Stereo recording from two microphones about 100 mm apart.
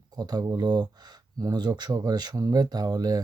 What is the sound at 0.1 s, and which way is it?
Speech, 45° right (ahead or behind).